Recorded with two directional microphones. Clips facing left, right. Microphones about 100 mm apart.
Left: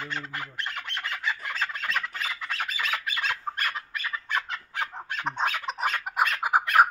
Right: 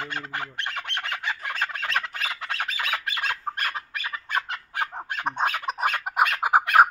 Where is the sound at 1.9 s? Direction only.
80° right.